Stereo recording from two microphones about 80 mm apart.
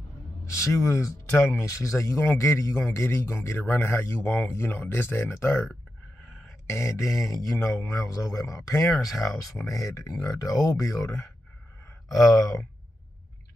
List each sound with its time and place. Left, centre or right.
0.7 s a man's voice: left
6.7 s a man's voice: left